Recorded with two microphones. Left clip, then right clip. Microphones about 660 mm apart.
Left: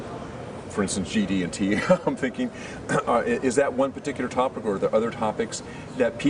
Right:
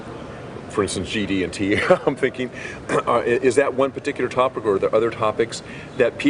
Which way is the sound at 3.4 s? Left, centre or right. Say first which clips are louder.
Right 5 dB; centre.